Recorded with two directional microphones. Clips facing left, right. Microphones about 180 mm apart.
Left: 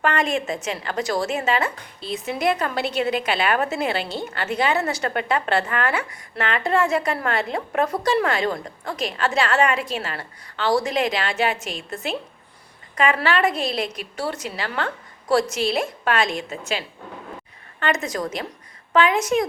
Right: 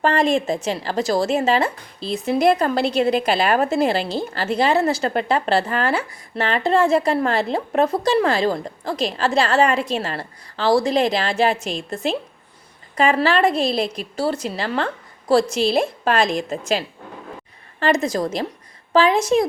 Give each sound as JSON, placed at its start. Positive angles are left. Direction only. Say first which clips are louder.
{"t": 0.0, "sound": "a woman's voice", "louder": "right 4 dB", "side_deg": -30}